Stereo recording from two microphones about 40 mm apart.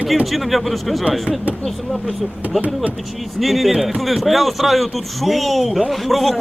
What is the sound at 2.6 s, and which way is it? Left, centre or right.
Speech, right.